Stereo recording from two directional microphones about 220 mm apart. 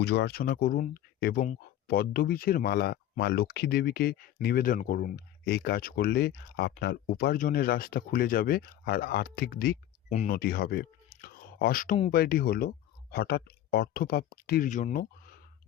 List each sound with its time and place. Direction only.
0.0 s speech: 50° left (ahead or behind)